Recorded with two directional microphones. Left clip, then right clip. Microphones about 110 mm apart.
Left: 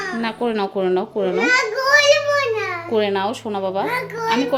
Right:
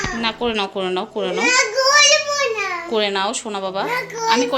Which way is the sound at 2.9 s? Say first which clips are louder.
Left 1 dB; 45° left (ahead or behind).